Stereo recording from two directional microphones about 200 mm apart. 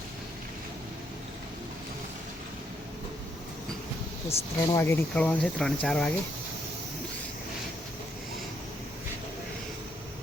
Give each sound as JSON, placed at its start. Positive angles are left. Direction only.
{"t": 4.3, "sound": "speech", "side_deg": 15}